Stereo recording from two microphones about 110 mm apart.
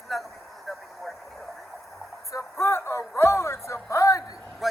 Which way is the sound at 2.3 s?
30° left (ahead or behind).